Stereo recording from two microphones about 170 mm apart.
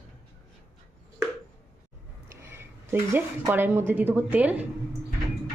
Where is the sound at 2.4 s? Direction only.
10° right (ahead or behind).